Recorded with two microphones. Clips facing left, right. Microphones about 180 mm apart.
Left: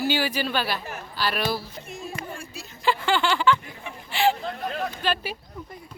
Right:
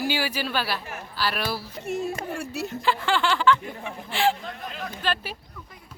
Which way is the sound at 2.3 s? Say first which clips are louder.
Right 9 dB; 70° right (ahead or behind).